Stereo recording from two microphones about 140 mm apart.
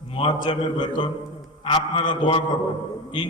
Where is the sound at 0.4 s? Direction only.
30° left (ahead or behind).